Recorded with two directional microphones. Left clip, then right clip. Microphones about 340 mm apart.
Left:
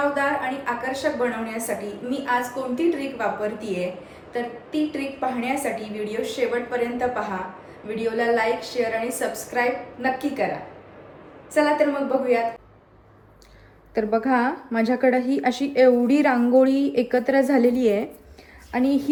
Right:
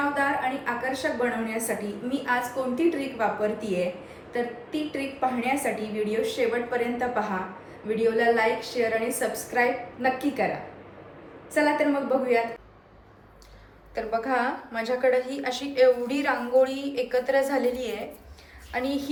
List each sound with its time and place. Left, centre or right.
0.1 s a woman's voice: centre
11.5 s a woman's voice: centre
13.9 s a woman's voice: left
18.8 s a woman's voice: centre